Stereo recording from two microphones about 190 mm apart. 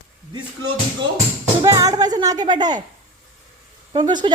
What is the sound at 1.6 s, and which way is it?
Speech, 20° right (ahead or behind).